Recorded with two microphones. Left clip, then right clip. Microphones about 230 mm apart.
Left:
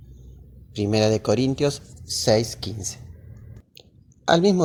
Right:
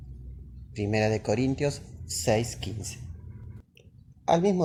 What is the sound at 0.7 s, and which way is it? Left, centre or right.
Speech, left.